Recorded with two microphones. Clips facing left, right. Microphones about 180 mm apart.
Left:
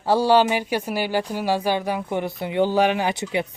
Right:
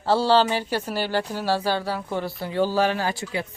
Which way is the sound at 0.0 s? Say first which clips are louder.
Left 2 dB; 15° left (ahead or behind).